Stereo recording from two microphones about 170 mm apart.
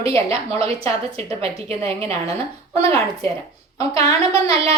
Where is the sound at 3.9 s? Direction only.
35° right (ahead or behind).